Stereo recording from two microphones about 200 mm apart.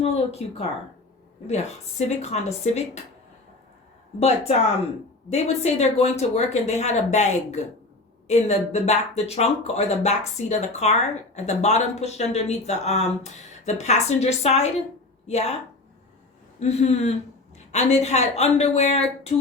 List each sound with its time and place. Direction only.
0.0 s speech: 30° left (ahead or behind)
4.2 s speech: 35° left (ahead or behind)
16.6 s speech: 35° left (ahead or behind)